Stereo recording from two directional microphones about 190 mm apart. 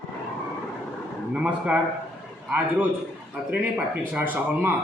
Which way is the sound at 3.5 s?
10° right (ahead or behind).